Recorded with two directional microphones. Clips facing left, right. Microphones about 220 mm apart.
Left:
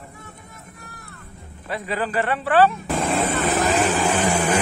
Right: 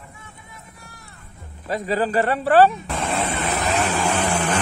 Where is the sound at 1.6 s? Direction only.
40° right (ahead or behind).